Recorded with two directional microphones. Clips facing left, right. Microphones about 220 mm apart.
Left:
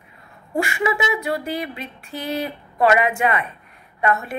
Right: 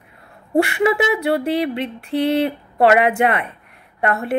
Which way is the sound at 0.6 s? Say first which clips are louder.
Right 6 dB; 60° right (ahead or behind).